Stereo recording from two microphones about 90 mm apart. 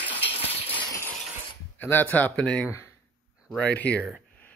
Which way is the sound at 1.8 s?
20° left (ahead or behind).